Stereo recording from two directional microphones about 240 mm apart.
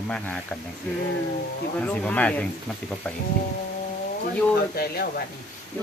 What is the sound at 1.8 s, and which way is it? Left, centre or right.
Speech, centre.